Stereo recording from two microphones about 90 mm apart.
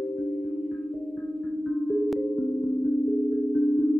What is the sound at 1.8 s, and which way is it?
Music, 10° left (ahead or behind).